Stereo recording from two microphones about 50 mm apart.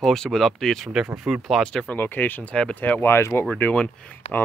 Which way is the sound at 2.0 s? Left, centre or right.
Left.